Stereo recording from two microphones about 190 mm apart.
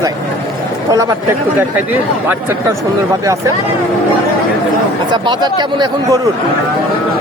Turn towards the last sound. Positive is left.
turn(degrees=-25)  # may be behind; listen again after turning